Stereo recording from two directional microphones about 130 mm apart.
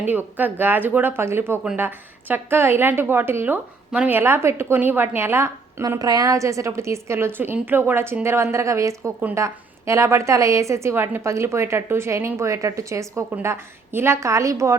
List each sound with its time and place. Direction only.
0.0 s a woman's voice: 15° right (ahead or behind)